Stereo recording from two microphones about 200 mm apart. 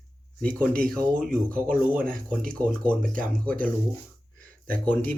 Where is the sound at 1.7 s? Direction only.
45° right (ahead or behind).